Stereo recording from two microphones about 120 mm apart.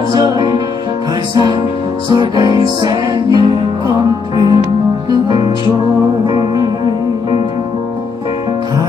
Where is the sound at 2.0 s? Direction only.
35° right (ahead or behind).